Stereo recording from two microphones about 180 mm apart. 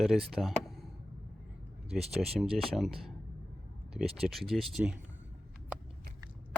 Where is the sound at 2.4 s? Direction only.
Centre (ahead or behind).